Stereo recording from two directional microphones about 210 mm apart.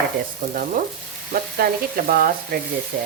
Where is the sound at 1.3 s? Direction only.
45° right (ahead or behind).